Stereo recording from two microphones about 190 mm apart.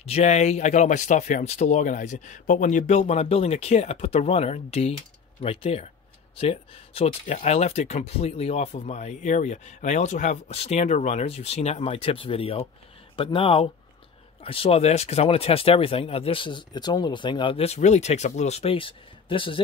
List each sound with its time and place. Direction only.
0.0 s speech: 35° left (ahead or behind)